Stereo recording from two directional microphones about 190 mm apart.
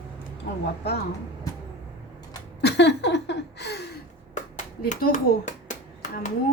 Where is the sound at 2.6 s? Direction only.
65° left (ahead or behind).